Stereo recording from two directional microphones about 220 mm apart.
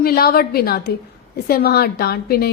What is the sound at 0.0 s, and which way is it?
Speech, 45° left (ahead or behind).